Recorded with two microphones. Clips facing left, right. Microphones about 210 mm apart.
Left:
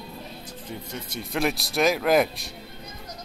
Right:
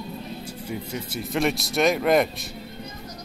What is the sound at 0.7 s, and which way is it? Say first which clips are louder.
Speech: right 4 dB; 5° right (ahead or behind).